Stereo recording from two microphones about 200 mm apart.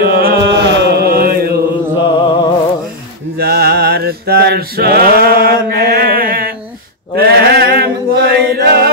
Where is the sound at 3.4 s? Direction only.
50° right (ahead or behind).